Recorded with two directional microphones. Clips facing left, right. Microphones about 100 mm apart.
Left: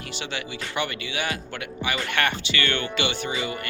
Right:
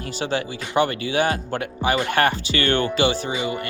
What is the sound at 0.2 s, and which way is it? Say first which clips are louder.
Speech: right 8 dB; 40° right (ahead or behind).